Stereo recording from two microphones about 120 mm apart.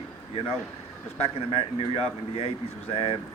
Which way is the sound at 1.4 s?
50° left (ahead or behind).